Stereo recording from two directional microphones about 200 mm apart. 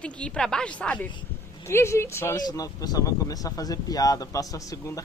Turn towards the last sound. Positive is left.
turn(degrees=15)  # may be behind; listen again after turning